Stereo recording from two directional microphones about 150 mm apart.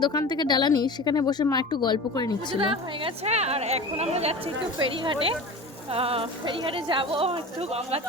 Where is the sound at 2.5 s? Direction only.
35° right (ahead or behind).